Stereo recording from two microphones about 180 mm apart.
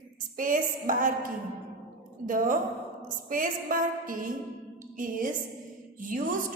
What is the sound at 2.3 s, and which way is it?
A woman's voice, 50° right (ahead or behind).